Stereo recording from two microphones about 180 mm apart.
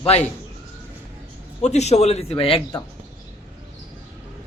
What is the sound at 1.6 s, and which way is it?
Speech, 40° left (ahead or behind).